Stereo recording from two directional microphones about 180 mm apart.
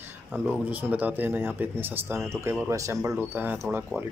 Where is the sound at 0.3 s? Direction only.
5° right (ahead or behind).